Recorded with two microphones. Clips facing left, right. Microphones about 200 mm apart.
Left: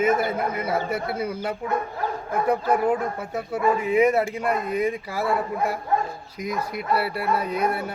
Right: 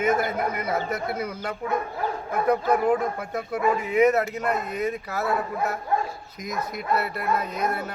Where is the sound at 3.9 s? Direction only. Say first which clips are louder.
Right 1 dB; 10° left (ahead or behind).